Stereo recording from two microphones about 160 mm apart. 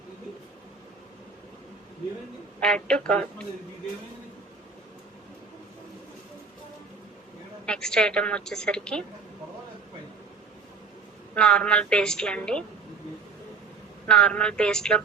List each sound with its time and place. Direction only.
2.6 s speech: 5° left (ahead or behind)
7.6 s a woman's voice: 5° left (ahead or behind)
11.3 s a woman's voice: 5° left (ahead or behind)
14.1 s a woman's voice: 5° left (ahead or behind)